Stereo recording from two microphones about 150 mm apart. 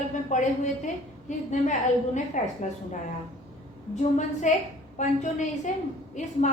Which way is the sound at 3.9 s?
55° left (ahead or behind).